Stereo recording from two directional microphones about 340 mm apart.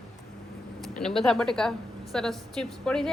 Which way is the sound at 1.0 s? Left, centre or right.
Centre.